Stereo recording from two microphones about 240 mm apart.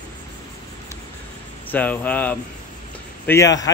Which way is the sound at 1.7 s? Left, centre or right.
Centre.